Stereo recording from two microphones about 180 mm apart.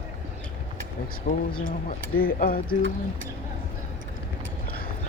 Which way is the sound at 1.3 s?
65° left (ahead or behind).